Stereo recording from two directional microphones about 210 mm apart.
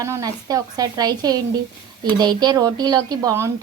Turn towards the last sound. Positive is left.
turn(degrees=-15)  # may be behind; listen again after turning